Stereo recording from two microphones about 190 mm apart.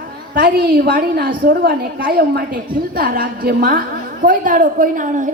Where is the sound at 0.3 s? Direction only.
55° right (ahead or behind).